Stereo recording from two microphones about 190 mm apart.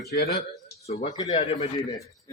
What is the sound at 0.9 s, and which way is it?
Speech, 35° left (ahead or behind).